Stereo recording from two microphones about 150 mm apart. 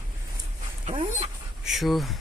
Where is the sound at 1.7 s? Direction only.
Centre (ahead or behind).